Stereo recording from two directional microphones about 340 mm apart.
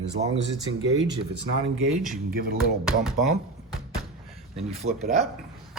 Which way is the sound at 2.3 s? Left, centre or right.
Right.